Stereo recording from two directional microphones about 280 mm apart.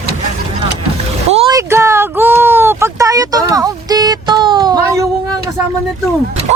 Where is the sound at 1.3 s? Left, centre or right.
Centre.